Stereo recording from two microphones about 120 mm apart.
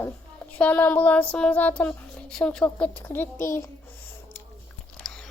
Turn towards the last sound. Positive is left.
turn(degrees=5)  # may be behind; listen again after turning